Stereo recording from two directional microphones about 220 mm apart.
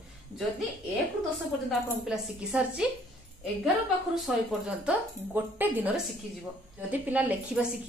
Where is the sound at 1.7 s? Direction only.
5° right (ahead or behind).